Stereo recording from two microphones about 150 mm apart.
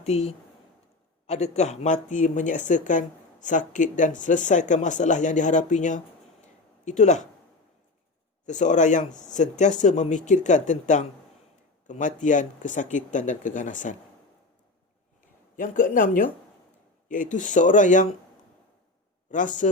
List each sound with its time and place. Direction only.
0.0 s speech: 45° left (ahead or behind)
8.4 s speech: 55° left (ahead or behind)
15.5 s speech: 65° left (ahead or behind)
19.3 s speech: 55° left (ahead or behind)